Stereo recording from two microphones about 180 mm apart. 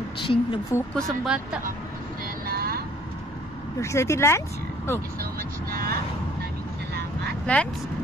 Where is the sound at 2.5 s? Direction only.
60° right (ahead or behind).